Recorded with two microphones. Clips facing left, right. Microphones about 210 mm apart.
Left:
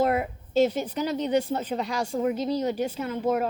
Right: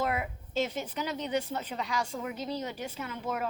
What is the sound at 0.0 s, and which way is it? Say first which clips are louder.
A woman's voice: left 8 dB; 35° left (ahead or behind).